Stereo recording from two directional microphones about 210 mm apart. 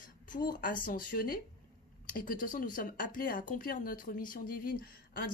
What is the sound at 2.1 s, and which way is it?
Speech, 40° left (ahead or behind).